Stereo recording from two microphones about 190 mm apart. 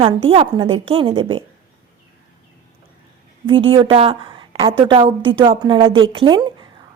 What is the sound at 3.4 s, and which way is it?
A woman's voice, 30° right (ahead or behind).